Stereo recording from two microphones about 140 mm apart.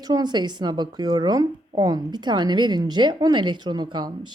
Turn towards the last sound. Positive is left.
turn(degrees=-35)  # may be behind; listen again after turning